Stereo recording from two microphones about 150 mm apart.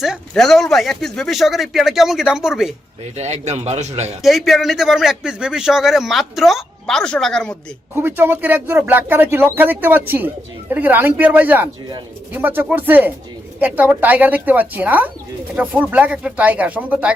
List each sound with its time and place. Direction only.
0.0 s speech: centre (ahead or behind)
3.2 s a man's voice: 50° right (ahead or behind)
4.2 s speech: centre (ahead or behind)
7.9 s speech: 15° right (ahead or behind)